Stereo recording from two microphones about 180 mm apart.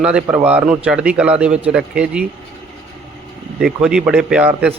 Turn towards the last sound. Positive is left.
turn(degrees=-5)  # may be behind; listen again after turning